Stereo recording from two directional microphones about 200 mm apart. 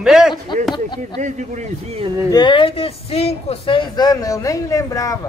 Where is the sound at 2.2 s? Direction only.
20° left (ahead or behind).